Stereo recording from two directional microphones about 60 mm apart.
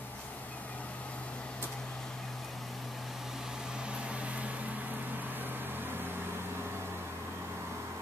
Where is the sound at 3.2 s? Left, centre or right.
Centre; by 6.7 s right.